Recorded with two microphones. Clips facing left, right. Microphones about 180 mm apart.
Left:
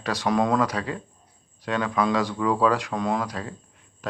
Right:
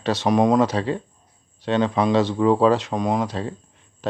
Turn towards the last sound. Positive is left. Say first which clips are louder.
# right 4 dB
turn(degrees=-25)  # may be behind; listen again after turning